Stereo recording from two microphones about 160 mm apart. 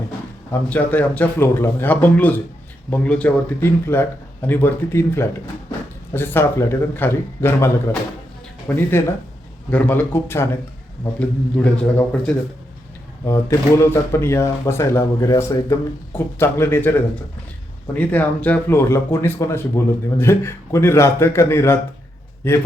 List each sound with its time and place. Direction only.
0.7 s speech: 10° left (ahead or behind)